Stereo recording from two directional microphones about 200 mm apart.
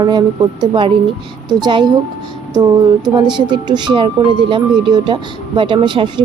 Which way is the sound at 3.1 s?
20° right (ahead or behind).